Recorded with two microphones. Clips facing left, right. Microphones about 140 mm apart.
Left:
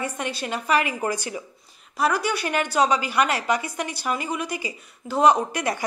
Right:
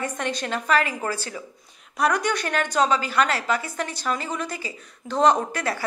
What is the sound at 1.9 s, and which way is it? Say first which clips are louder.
A woman's voice: even; 5° left (ahead or behind).